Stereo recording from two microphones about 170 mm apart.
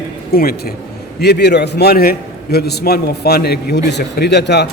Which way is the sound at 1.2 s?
75° left (ahead or behind).